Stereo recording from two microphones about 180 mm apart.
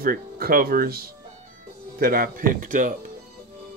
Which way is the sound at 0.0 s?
55° right (ahead or behind).